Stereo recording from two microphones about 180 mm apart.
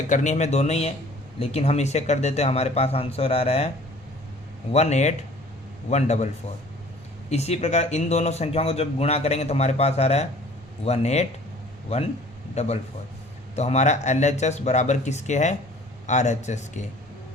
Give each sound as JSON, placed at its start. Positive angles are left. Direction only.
{"t": 0.1, "sound": "speech", "side_deg": 45}
{"t": 4.7, "sound": "speech", "side_deg": 35}
{"t": 7.3, "sound": "speech", "side_deg": 35}